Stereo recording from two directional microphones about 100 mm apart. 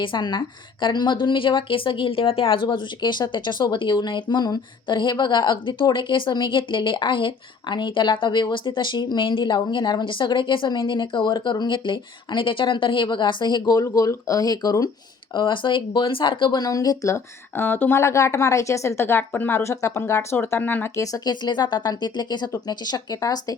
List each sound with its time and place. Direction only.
0.0 s a woman's voice: 50° left (ahead or behind)
13.8 s speech: 30° left (ahead or behind)
15.4 s a woman's voice: 55° left (ahead or behind); by 17.2 s 35° left (ahead or behind)
17.6 s speech: 20° left (ahead or behind)
20.9 s a woman's voice: 35° left (ahead or behind)